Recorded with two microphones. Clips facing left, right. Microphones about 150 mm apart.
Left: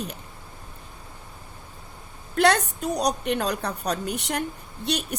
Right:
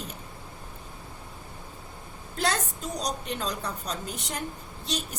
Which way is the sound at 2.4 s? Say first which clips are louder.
Left 8 dB; 65° left (ahead or behind).